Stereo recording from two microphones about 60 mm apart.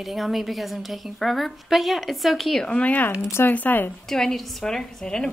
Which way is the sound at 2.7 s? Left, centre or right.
Left.